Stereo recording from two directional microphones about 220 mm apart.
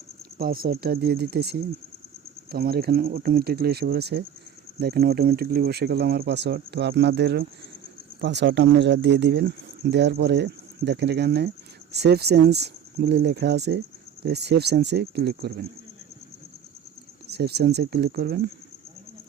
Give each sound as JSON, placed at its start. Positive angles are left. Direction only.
{"t": 0.3, "sound": "speech", "side_deg": -40}
{"t": 17.2, "sound": "speech", "side_deg": -50}